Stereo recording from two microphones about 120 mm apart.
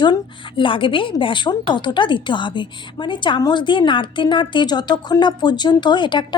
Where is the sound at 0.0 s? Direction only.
40° left (ahead or behind).